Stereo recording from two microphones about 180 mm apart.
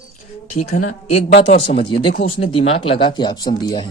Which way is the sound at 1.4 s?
30° left (ahead or behind).